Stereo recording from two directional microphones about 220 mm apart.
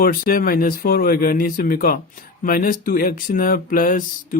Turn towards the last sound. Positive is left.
turn(degrees=35)  # may be behind; listen again after turning